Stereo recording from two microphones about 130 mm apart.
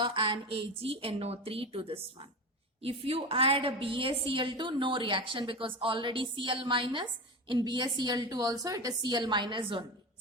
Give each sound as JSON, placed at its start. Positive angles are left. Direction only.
{"t": 0.0, "sound": "a woman's voice", "side_deg": -40}